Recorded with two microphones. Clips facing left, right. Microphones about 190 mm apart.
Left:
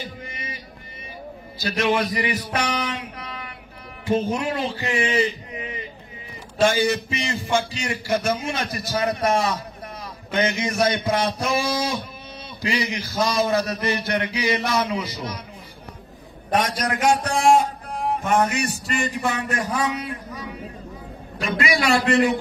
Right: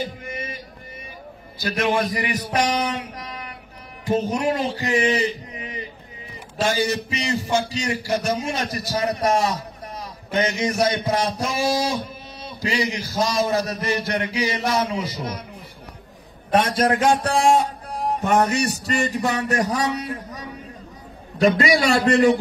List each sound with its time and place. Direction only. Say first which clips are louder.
0.3 s music: right 5 dB; 50° right (ahead or behind)
1.6 s a man's voice: even; 50° right (ahead or behind)
6.6 s a man's voice: left 3 dB; 40° right (ahead or behind)
16.5 s a man's voice: right 4 dB; 30° right (ahead or behind)
21.4 s a man's voice: right 6 dB; 40° right (ahead or behind)